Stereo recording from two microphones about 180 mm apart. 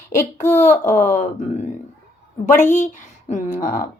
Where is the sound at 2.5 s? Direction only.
45° left (ahead or behind).